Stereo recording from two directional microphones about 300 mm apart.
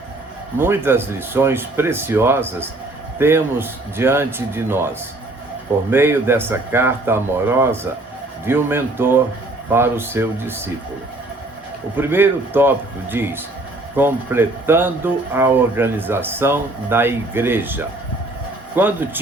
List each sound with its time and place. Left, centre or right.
0.6 s speech: centre
5.9 s speech: centre
11.9 s speech: centre